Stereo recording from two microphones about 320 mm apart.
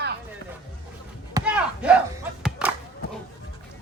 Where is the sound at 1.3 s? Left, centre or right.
Centre.